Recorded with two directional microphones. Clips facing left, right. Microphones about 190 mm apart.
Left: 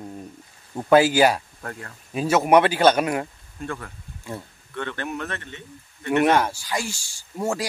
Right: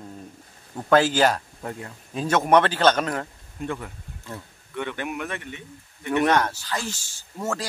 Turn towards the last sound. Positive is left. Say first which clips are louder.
# left 3 dB
turn(degrees=10)  # may be behind; listen again after turning